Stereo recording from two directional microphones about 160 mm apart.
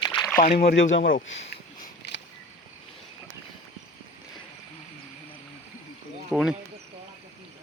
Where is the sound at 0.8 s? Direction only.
60° left (ahead or behind).